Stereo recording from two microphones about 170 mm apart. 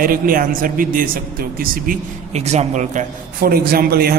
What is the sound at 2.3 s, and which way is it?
A man's voice, 40° right (ahead or behind).